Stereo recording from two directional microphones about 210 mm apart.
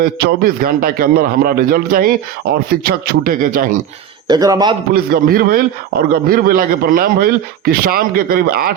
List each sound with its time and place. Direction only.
0.0 s a man's voice: 45° right (ahead or behind)
4.3 s speech: 15° right (ahead or behind)
4.9 s a man's voice: 45° right (ahead or behind)